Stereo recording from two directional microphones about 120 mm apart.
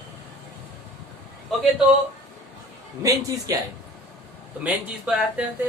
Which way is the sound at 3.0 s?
30° right (ahead or behind).